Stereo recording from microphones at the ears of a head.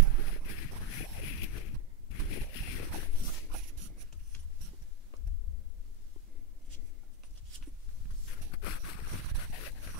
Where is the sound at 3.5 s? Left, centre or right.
Right.